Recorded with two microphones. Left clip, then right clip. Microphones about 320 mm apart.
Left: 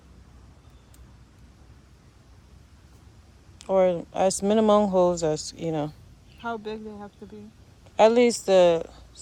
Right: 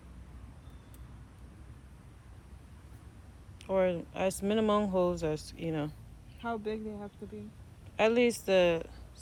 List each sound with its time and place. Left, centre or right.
3.6 s a woman's voice: centre